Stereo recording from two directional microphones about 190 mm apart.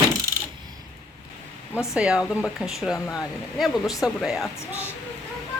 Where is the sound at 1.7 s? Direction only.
15° left (ahead or behind).